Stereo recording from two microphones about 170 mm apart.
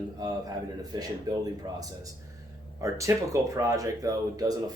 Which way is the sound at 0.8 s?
20° right (ahead or behind).